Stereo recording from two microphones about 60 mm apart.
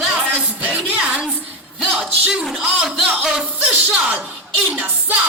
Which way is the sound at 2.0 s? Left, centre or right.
Centre.